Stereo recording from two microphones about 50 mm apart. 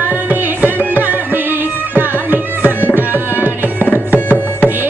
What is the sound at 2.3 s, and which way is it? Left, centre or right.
Tabla, right.